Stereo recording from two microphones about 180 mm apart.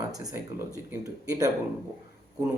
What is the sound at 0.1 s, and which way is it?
A man's voice, 20° right (ahead or behind).